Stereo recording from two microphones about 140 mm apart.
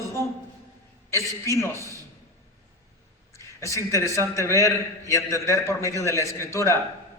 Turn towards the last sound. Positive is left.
turn(degrees=20)  # may be behind; listen again after turning